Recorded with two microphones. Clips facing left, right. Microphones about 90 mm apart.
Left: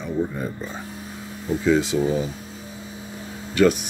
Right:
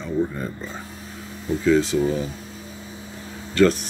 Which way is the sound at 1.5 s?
15° left (ahead or behind).